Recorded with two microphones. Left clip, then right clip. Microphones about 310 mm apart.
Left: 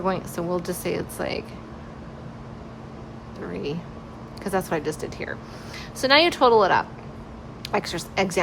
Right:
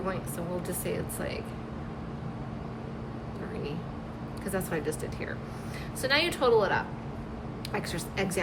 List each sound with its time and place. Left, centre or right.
0.0 s speech: centre
4.4 s speech: centre